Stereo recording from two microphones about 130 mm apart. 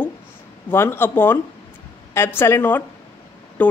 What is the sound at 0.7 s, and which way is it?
Speech, 20° left (ahead or behind).